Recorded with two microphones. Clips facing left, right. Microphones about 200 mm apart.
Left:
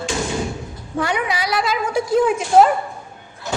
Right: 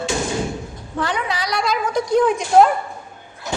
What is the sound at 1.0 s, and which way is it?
A woman's voice, 10° left (ahead or behind).